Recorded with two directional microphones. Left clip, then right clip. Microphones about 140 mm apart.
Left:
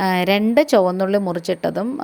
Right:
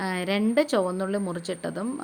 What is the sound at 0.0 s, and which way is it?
A woman's voice, 50° left (ahead or behind).